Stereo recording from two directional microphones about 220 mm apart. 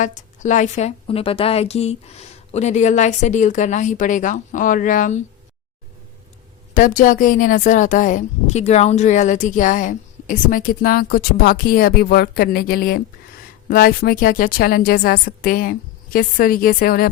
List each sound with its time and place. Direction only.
0.0 s speech: 35° left (ahead or behind)
6.7 s speech: 35° left (ahead or behind)